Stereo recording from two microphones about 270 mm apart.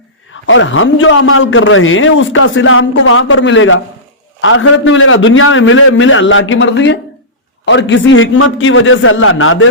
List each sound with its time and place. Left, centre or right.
0.4 s a man's voice: left